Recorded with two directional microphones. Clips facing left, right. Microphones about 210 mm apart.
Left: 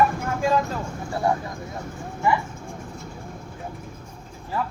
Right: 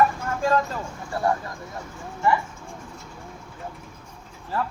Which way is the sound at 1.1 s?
15° left (ahead or behind).